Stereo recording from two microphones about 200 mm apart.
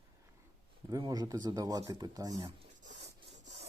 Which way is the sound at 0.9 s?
20° right (ahead or behind).